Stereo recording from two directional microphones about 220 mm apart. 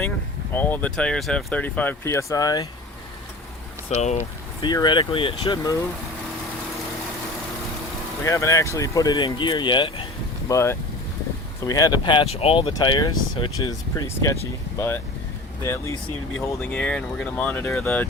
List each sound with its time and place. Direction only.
0.5 s speech: 10° left (ahead or behind)
3.8 s speech: 30° left (ahead or behind)
4.6 s speech: 20° left (ahead or behind)
8.2 s speech: 15° left (ahead or behind)